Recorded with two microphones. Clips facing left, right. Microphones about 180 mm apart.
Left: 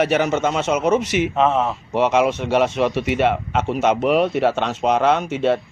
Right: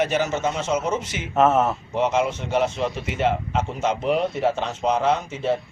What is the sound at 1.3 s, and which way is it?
Speech, 5° right (ahead or behind).